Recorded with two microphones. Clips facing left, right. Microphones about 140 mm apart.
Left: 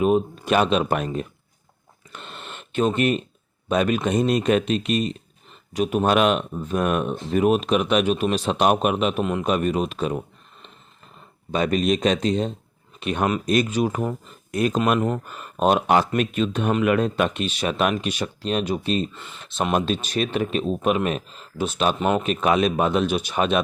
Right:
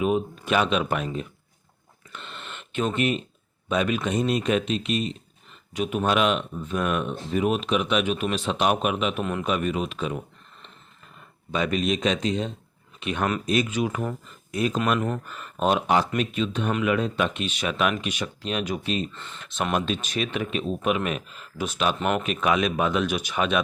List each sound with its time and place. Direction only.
0.0 s speech: 40° left (ahead or behind)
2.1 s a sound: 40° left (ahead or behind)
3.7 s speech: 45° left (ahead or behind)
11.5 s speech: 40° left (ahead or behind)
14.9 s speech: 20° left (ahead or behind)
15.3 s speech: 40° left (ahead or behind)
19.1 s speech: 10° left (ahead or behind)
19.7 s speech: 35° left (ahead or behind)
21.9 s speech: 15° left (ahead or behind)
22.2 s speech: 35° left (ahead or behind)